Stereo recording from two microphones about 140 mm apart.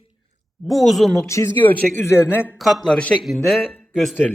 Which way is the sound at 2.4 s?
Centre (ahead or behind).